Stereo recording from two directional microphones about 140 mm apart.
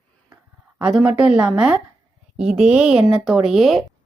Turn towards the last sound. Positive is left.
turn(degrees=0)  # may be behind; listen again after turning